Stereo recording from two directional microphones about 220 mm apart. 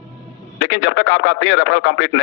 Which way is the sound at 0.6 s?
65° left (ahead or behind).